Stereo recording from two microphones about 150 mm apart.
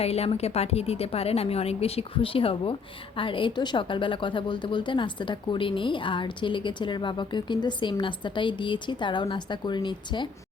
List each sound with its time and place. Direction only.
0.0 s a woman's voice: 45° left (ahead or behind)